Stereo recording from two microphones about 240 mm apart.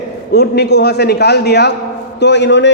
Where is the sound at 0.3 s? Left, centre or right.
Left.